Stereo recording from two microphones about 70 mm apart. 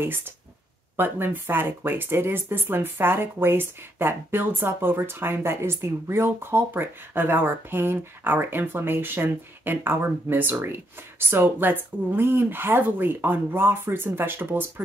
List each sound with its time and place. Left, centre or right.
0.0 s speech: right